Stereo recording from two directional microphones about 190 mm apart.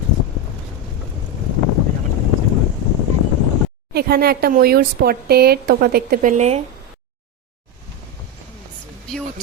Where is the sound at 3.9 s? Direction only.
55° right (ahead or behind); by 6.6 s 35° right (ahead or behind).